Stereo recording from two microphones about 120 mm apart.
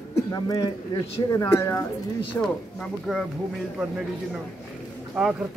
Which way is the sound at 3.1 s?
Centre (ahead or behind).